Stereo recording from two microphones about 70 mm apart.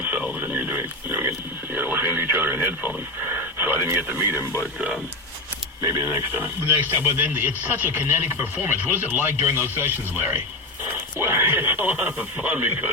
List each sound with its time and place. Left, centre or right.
0.3 s a sound: right
1.7 s radio: right
3.6 s speech: right
5.8 s speech: right
6.1 s speech: right